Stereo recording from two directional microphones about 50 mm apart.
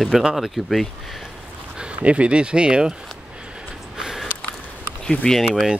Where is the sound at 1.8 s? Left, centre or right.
Right.